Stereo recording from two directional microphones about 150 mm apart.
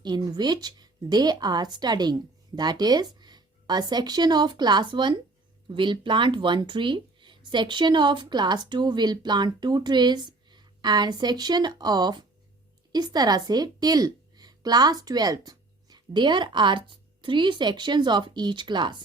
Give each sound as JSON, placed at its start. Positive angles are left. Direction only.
{"t": 0.0, "sound": "speech", "side_deg": -30}